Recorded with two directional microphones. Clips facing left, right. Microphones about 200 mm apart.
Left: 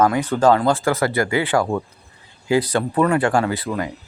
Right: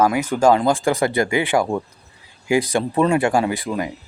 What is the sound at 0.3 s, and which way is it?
Speech, 10° right (ahead or behind).